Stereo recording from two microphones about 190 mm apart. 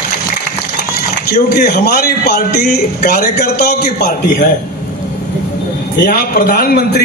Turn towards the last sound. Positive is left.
turn(degrees=50)  # may be behind; listen again after turning